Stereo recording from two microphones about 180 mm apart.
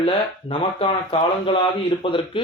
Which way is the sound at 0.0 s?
30° left (ahead or behind).